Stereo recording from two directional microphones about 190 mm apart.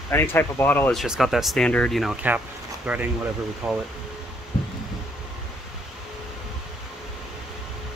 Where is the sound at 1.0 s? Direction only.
Centre (ahead or behind).